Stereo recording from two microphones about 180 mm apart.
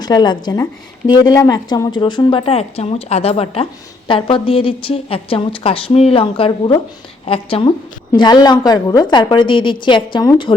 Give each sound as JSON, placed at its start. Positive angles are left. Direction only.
{"t": 0.0, "sound": "a woman's voice", "side_deg": 25}